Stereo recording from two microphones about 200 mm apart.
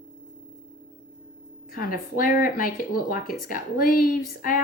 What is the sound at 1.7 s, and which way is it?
A woman's voice, 45° left (ahead or behind).